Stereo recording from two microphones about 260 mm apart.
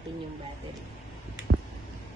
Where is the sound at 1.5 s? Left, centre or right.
Right.